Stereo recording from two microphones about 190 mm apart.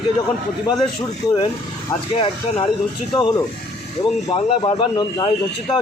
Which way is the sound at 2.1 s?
30° left (ahead or behind).